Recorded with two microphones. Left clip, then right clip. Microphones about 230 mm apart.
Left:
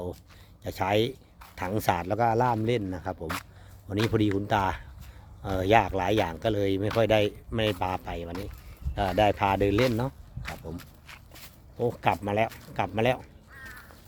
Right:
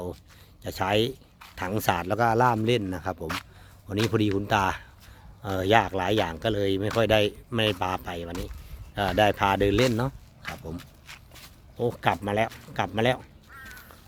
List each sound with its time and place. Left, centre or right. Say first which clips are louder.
0.6 s speech: right 1 dB; centre
3.9 s speech: right 1 dB; centre
4.4 s speech: right 2 dB; centre
8.3 s speech: right 1 dB; centre
9.0 s speech: right 1 dB; centre